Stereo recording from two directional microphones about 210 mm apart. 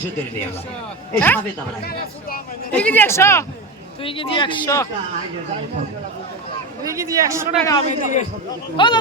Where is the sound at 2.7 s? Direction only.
10° left (ahead or behind).